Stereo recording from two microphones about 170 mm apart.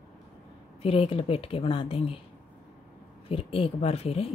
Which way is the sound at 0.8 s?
35° left (ahead or behind).